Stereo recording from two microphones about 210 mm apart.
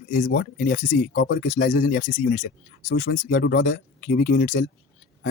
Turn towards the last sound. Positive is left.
turn(degrees=40)  # may be behind; listen again after turning